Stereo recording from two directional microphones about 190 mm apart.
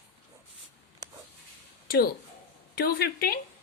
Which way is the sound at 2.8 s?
55° left (ahead or behind).